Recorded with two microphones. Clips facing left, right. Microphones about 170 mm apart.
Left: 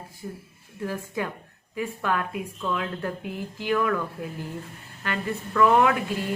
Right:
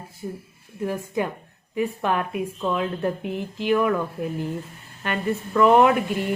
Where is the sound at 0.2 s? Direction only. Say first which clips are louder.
Right 5 dB; 30° right (ahead or behind).